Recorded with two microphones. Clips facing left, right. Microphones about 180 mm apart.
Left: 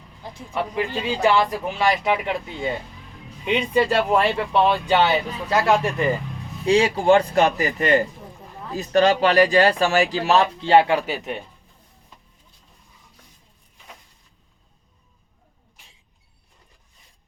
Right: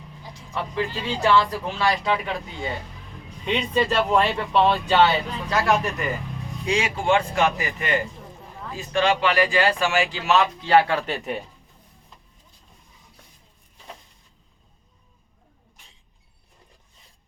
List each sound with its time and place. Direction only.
0.8 s speech: 20° left (ahead or behind)
3.4 s speech: 10° left (ahead or behind)